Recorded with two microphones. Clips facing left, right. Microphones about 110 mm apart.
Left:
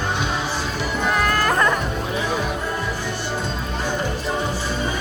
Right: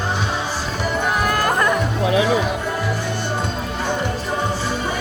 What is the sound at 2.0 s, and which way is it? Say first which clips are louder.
Music: right 8 dB; 90° right.